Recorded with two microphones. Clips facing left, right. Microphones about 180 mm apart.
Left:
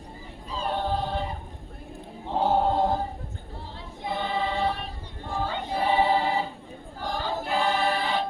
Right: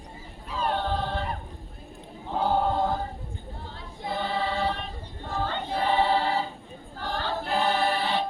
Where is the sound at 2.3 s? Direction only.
20° left (ahead or behind).